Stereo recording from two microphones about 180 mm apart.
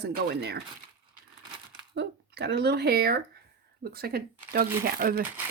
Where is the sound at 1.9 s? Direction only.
70° right (ahead or behind).